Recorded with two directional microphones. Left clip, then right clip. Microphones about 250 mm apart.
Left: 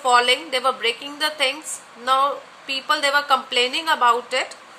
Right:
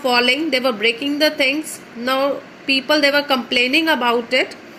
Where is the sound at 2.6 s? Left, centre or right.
Left.